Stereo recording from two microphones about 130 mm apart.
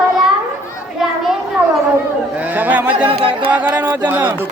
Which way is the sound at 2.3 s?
10° right (ahead or behind).